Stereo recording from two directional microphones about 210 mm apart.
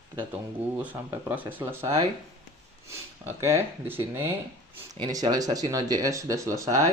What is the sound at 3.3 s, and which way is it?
Speech, 10° right (ahead or behind).